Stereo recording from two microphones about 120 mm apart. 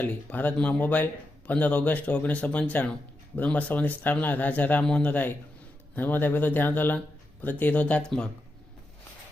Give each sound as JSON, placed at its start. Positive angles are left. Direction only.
{"t": 0.0, "sound": "speech", "side_deg": 15}